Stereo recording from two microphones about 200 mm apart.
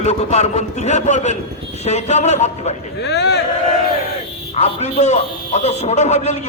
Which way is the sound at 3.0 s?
55° left (ahead or behind).